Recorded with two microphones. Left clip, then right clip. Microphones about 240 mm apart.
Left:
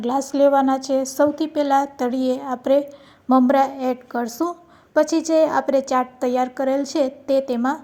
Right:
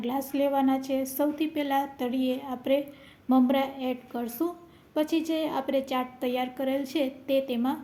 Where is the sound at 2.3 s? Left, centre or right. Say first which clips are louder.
Left 9 dB; left.